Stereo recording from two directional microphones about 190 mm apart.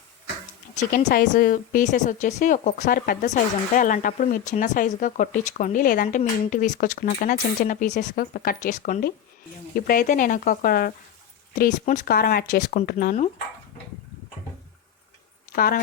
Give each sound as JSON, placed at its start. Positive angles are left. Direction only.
{"t": 0.8, "sound": "speech", "side_deg": 45}
{"t": 15.5, "sound": "speech", "side_deg": 50}